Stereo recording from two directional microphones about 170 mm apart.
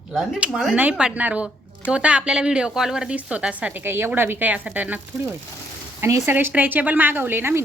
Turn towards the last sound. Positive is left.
turn(degrees=-15)  # may be behind; listen again after turning